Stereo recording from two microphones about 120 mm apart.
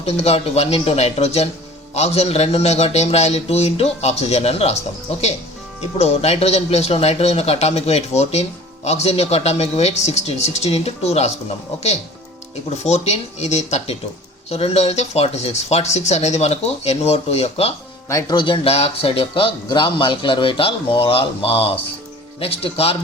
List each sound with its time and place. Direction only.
0.0 s a man's voice: 60° left (ahead or behind)
6.0 s a man's voice: 60° left (ahead or behind)
12.8 s a man's voice: 65° left (ahead or behind)
18.1 s a man's voice: 25° left (ahead or behind)
18.3 s speech: 45° left (ahead or behind)